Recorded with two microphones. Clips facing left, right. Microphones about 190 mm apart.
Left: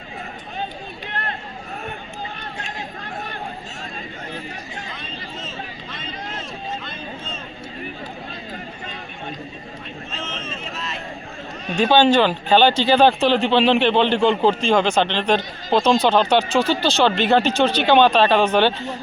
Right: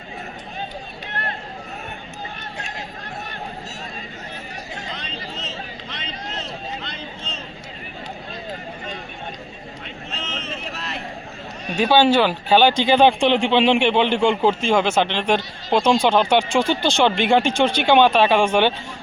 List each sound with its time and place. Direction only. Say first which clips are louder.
4.9 s a sound: right 1 dB; 85° right
10.1 s run: right 1 dB; 70° right (ahead or behind)
11.8 s speech: left 1 dB; 10° right (ahead or behind)